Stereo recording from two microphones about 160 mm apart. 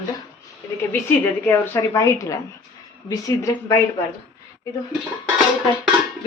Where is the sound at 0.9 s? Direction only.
15° left (ahead or behind).